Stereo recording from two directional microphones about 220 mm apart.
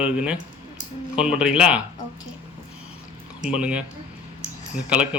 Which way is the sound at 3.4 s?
5° right (ahead or behind).